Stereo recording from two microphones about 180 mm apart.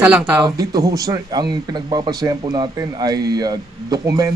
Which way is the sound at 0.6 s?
20° right (ahead or behind).